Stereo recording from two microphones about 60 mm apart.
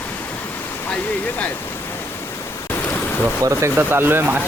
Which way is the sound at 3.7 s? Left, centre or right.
Right.